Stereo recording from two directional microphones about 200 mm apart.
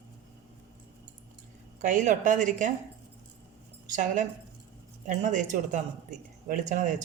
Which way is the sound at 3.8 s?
40° right (ahead or behind).